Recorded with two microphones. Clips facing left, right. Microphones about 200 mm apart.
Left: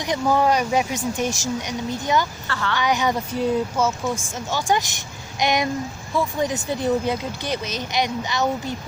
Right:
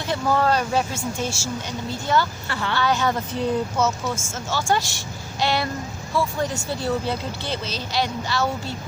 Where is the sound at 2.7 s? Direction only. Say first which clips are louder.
Even; 15° left (ahead or behind).